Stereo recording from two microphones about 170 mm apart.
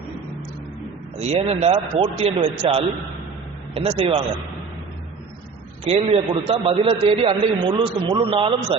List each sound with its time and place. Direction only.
1.2 s a man's voice: 35° right (ahead or behind)
5.8 s a man's voice: 35° right (ahead or behind)